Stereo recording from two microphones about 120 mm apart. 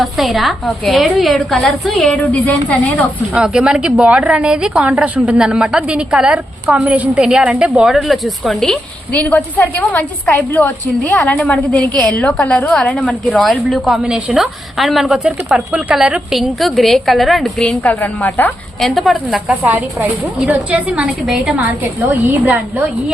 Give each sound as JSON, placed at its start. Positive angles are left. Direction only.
{"t": 0.0, "sound": "a woman's voice", "side_deg": 0}
{"t": 2.1, "sound": "a woman's voice", "side_deg": 10}
{"t": 3.3, "sound": "a woman's voice", "side_deg": -5}
{"t": 18.8, "sound": "a woman's voice", "side_deg": 0}
{"t": 19.6, "sound": "a woman's voice", "side_deg": -15}